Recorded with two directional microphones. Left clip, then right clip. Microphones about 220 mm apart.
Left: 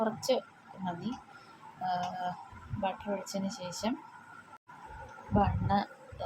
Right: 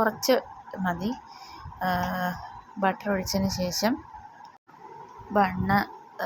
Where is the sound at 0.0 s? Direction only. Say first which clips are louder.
Right 7 dB; 20° right (ahead or behind).